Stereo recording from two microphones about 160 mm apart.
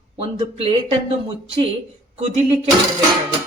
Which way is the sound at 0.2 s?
35° right (ahead or behind).